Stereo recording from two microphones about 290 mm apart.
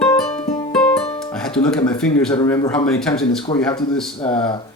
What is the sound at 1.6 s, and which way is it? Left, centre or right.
A man's voice, centre.